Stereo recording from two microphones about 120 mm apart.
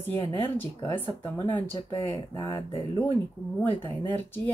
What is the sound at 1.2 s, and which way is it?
Speech, 20° left (ahead or behind).